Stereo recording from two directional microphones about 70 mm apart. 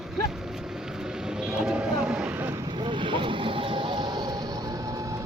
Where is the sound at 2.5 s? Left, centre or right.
Right.